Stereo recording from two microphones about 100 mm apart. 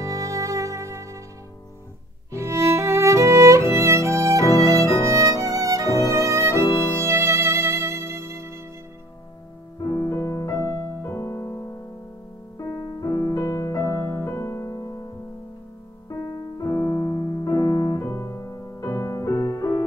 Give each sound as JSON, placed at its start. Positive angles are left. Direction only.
{"t": 0.0, "sound": "music", "side_deg": -30}
{"t": 2.3, "sound": "music", "side_deg": -30}
{"t": 5.9, "sound": "violin", "side_deg": 35}
{"t": 6.2, "sound": "violin", "side_deg": -30}
{"t": 6.8, "sound": "music", "side_deg": -25}
{"t": 9.8, "sound": "music", "side_deg": 30}
{"t": 16.1, "sound": "music", "side_deg": 40}